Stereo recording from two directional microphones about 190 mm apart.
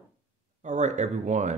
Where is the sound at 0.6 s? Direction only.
40° right (ahead or behind).